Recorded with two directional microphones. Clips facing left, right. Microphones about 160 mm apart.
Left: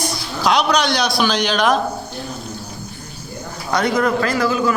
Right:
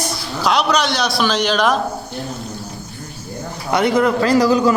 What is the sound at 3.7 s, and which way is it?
Speech, 20° right (ahead or behind).